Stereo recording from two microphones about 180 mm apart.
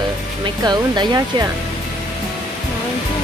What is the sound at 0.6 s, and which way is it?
Music, 25° right (ahead or behind).